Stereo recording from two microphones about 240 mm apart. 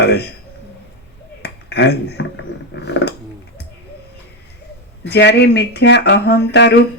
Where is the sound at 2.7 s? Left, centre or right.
Left.